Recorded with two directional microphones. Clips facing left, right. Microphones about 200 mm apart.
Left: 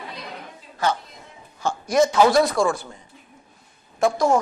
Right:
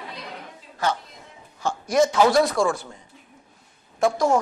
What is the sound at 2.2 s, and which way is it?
Speech, 40° left (ahead or behind).